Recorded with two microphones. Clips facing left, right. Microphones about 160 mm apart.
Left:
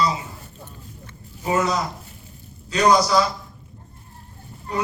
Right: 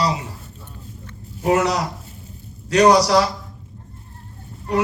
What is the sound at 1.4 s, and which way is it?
A man's voice, 80° right.